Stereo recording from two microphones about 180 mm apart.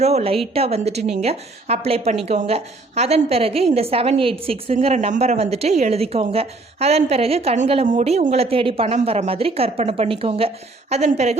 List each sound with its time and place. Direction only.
0.0 s a woman's voice: 35° right (ahead or behind)